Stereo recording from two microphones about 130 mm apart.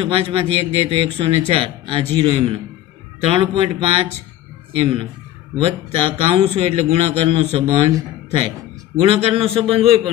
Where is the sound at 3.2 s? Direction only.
45° right (ahead or behind).